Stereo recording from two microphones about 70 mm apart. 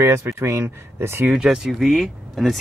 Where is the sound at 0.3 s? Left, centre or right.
Right.